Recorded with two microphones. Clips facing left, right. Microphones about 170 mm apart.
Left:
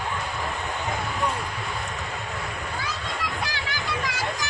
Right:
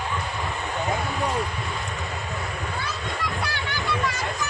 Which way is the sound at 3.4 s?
90° left.